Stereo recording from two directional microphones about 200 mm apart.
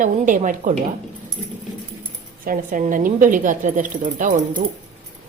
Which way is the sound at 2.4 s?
45° right (ahead or behind).